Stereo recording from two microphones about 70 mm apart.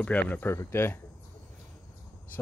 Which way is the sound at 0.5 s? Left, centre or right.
Left.